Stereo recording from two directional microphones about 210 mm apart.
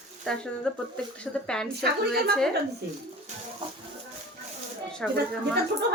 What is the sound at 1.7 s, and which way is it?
Speech, 50° right (ahead or behind).